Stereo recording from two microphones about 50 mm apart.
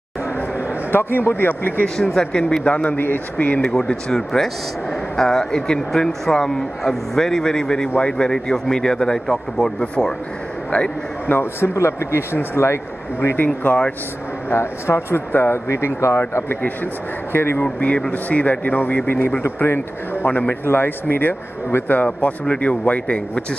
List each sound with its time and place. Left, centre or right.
0.9 s speech: left
2.0 s speech: centre
2.6 s speech: left
3.6 s speech: centre
11.2 s speech: left
11.7 s speech: left
14.5 s speech: left
15.7 s speech: left
16.6 s speech: left
17.7 s speech: left
20.2 s speech: left
20.6 s speech: left
21.9 s speech: left